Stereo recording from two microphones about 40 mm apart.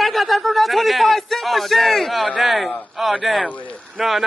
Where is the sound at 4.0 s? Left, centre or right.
Centre.